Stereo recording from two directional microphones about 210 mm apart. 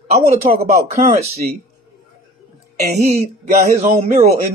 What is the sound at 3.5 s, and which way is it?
Speech, 30° right (ahead or behind).